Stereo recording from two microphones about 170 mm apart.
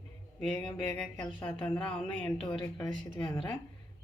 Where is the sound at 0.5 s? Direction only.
20° left (ahead or behind).